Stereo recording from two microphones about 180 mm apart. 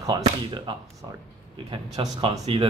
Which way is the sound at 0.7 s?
25° right (ahead or behind).